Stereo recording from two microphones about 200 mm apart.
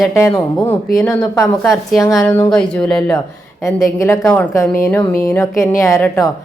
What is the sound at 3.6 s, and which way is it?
Speech, 15° left (ahead or behind).